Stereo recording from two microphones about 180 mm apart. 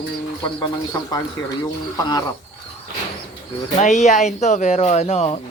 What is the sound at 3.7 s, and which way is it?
Speech, 40° left (ahead or behind).